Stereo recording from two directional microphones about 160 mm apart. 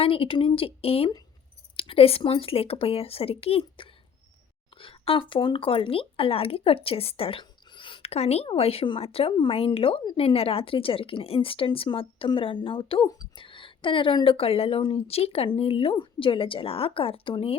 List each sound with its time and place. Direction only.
0.0 s speech: 35° left (ahead or behind)